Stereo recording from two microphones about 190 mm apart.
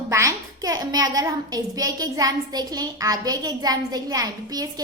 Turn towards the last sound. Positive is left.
turn(degrees=-20)  # may be behind; listen again after turning